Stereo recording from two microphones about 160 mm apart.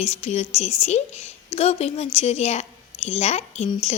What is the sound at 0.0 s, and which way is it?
Speech, 45° left (ahead or behind).